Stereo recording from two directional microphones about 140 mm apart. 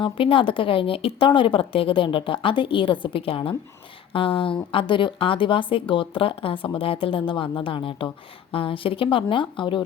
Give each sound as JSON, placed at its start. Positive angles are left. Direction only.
{"t": 0.0, "sound": "speech", "side_deg": 40}